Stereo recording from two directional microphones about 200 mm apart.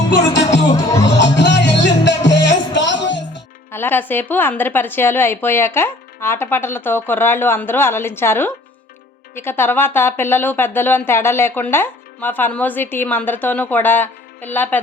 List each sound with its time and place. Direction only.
0.1 s music: 60° left (ahead or behind)
0.7 s music: 15° left (ahead or behind)
1.2 s music: 60° left (ahead or behind)
3.7 s speech: 10° left (ahead or behind)